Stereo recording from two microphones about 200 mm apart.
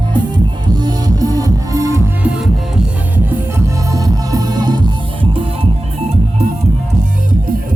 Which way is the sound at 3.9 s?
20° right (ahead or behind).